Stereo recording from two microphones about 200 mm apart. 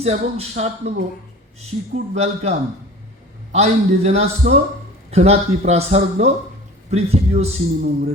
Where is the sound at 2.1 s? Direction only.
30° right (ahead or behind).